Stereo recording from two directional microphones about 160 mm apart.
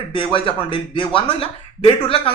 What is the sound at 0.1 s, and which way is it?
Speech, 35° left (ahead or behind).